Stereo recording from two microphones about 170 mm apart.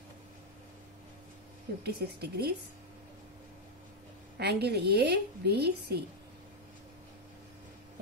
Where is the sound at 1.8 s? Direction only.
70° right (ahead or behind).